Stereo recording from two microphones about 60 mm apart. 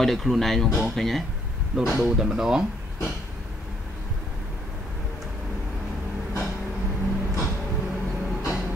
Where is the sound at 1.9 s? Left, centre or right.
Centre.